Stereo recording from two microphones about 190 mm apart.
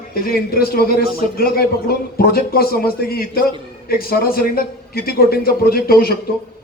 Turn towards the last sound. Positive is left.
turn(degrees=50)  # may be behind; listen again after turning